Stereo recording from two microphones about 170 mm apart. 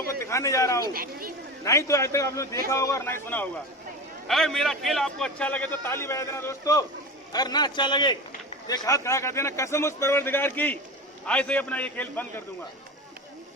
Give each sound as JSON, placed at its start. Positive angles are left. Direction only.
{"t": 0.3, "sound": "a man's voice", "side_deg": 20}
{"t": 0.9, "sound": "speech", "side_deg": -55}
{"t": 1.6, "sound": "a man's voice", "side_deg": 20}